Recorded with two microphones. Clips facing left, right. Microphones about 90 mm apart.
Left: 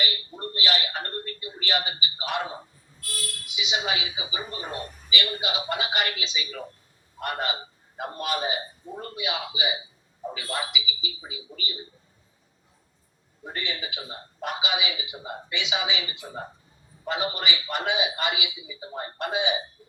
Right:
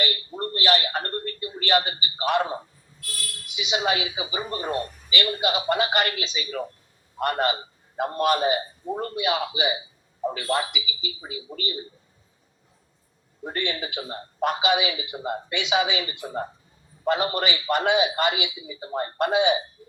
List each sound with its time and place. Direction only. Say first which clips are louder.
0.0 s a sound: right 4 dB; 50° right (ahead or behind)
3.5 s speech: right 4 dB; 45° right (ahead or behind)
13.4 s speech: right 5 dB; 50° right (ahead or behind)